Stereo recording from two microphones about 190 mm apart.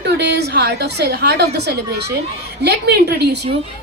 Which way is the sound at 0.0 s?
60° right (ahead or behind).